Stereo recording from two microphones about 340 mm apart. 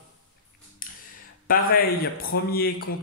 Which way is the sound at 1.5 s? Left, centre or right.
Left.